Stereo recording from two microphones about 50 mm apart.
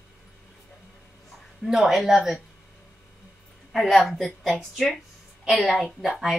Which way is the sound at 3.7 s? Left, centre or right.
Centre.